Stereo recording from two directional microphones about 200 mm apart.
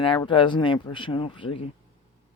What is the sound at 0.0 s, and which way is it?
Speech, 25° left (ahead or behind).